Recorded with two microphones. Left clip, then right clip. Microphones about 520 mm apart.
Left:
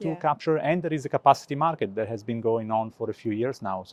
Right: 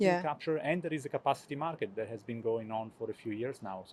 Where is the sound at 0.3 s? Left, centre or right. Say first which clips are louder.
Left 9 dB; left.